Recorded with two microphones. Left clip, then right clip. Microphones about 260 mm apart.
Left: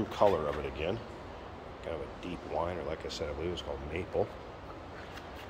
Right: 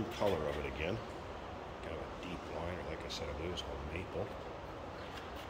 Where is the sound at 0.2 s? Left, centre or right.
Centre.